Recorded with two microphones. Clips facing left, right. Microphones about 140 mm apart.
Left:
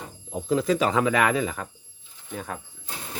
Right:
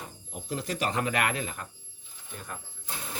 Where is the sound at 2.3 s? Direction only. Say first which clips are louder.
Left 8 dB; 90° left.